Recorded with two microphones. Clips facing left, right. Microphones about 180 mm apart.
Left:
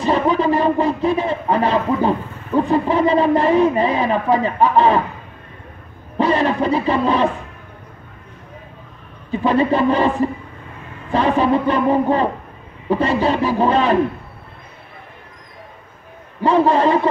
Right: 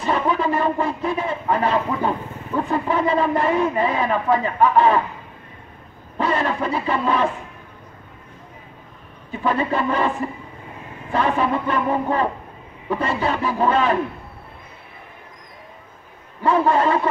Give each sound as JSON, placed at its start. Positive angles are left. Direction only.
{"t": 0.0, "sound": "speech", "side_deg": 25}
{"t": 6.1, "sound": "a sound", "side_deg": 25}
{"t": 6.7, "sound": "speech", "side_deg": 25}
{"t": 9.3, "sound": "speech", "side_deg": 20}
{"t": 16.4, "sound": "speech", "side_deg": 25}